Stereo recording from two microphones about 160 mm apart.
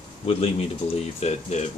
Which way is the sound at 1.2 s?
45° left (ahead or behind).